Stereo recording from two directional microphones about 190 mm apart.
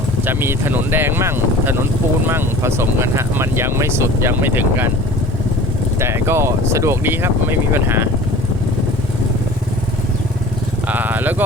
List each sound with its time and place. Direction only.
0.3 s speech: 10° right (ahead or behind)
6.0 s speech: 15° right (ahead or behind)
10.8 s a sound: 10° right (ahead or behind)